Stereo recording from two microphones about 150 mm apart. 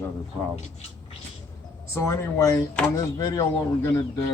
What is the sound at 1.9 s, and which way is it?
Speech, 20° left (ahead or behind).